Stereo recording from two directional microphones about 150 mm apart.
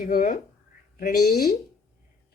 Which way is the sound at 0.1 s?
70° left (ahead or behind).